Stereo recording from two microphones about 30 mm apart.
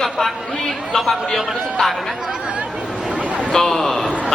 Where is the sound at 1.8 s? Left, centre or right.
Left.